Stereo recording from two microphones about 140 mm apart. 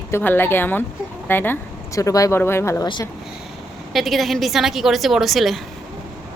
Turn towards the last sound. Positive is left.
turn(degrees=0)  # may be behind; listen again after turning